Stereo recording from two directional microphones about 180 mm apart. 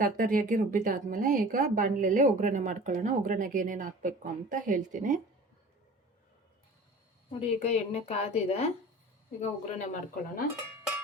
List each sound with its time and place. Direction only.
0.0 s speech: 50° right (ahead or behind)
7.3 s a woman's voice: 35° left (ahead or behind)